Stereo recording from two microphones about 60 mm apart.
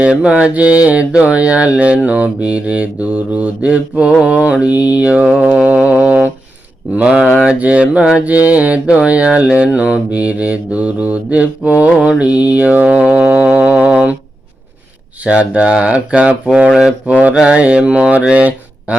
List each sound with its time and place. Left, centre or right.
0.0 s mantra: centre
13.2 s a sound: right
15.2 s mantra: right